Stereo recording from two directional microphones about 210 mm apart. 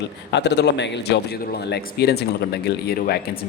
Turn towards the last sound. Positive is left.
turn(degrees=50)  # may be behind; listen again after turning